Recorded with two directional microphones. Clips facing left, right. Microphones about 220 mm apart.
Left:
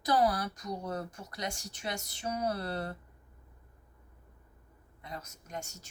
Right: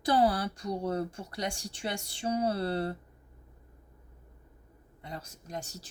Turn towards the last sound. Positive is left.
turn(degrees=-35)  # may be behind; listen again after turning